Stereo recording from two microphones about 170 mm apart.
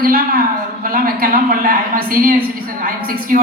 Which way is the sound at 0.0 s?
60° right (ahead or behind).